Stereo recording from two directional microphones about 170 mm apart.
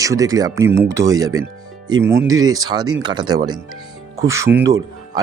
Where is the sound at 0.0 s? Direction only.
20° right (ahead or behind).